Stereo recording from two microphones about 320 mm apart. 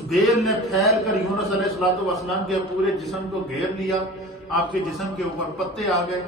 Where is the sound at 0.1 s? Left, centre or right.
Centre.